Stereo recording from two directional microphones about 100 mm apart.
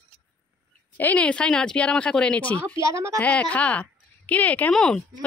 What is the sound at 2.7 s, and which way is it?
Speech, 30° right (ahead or behind).